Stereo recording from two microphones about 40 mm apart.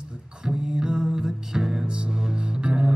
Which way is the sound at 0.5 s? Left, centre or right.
Right.